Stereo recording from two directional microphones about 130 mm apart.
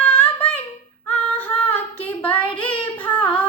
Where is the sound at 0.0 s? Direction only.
15° left (ahead or behind).